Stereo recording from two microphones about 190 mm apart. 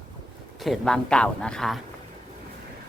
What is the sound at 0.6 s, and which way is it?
A woman's voice, centre (ahead or behind).